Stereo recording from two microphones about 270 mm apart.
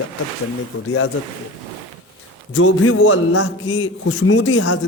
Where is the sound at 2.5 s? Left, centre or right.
Left.